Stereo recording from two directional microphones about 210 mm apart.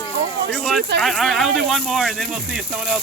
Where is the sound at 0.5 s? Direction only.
Centre (ahead or behind).